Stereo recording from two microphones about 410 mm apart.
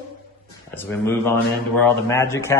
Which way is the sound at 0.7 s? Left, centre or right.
Centre.